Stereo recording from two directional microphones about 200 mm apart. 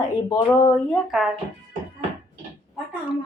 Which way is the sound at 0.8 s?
Centre (ahead or behind).